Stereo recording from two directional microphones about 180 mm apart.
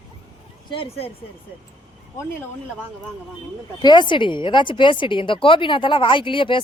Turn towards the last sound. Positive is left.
turn(degrees=30)  # may be behind; listen again after turning